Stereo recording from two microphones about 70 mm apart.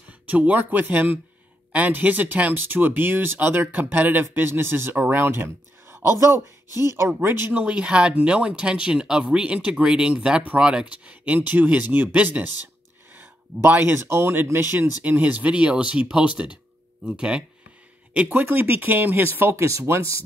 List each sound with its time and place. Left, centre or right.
0.3 s speech: right
7.6 s speech: centre
18.1 s speech: right
19.5 s speech: right